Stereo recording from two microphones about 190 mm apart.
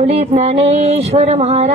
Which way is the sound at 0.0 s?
35° right (ahead or behind).